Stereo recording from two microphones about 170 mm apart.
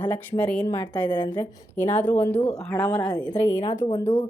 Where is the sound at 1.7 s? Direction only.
10° left (ahead or behind).